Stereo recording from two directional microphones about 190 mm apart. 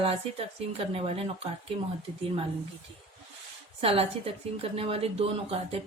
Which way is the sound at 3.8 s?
30° right (ahead or behind).